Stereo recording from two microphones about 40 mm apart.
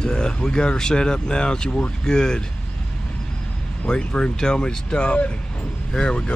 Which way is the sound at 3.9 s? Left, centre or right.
Left.